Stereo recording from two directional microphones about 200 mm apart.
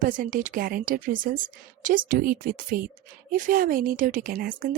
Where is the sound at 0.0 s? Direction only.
40° right (ahead or behind).